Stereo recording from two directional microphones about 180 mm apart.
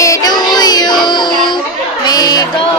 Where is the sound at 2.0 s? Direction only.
20° left (ahead or behind).